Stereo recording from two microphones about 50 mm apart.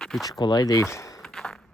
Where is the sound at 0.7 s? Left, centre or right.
Left.